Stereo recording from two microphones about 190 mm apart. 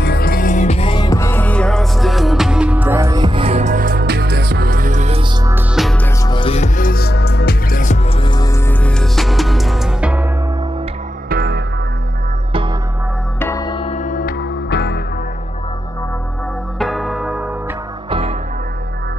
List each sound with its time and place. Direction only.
0.0 s music: 55° left (ahead or behind); by 5.3 s 35° right (ahead or behind)
5.4 s music: 10° right (ahead or behind)
5.8 s music: centre (ahead or behind)
6.0 s music: 20° left (ahead or behind)
6.8 s music: 55° left (ahead or behind)
8.2 s music: 20° left (ahead or behind); by 10.2 s 5° right (ahead or behind)
11.2 s music: 55° right (ahead or behind)
13.4 s music: 15° left (ahead or behind); by 15.0 s 60° left (ahead or behind)
16.7 s music: centre (ahead or behind)